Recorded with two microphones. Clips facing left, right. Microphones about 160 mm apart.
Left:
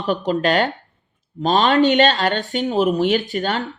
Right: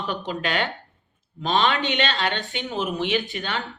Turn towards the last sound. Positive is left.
turn(degrees=40)  # may be behind; listen again after turning